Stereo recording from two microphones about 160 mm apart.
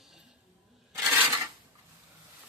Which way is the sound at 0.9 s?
10° right (ahead or behind).